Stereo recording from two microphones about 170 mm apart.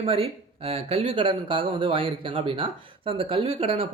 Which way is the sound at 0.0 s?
35° right (ahead or behind).